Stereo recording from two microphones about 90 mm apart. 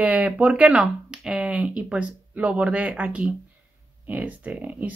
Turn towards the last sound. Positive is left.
turn(degrees=-15)  # may be behind; listen again after turning